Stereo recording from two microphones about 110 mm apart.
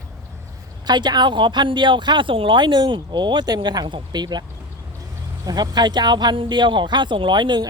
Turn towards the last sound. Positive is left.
turn(degrees=-45)  # may be behind; listen again after turning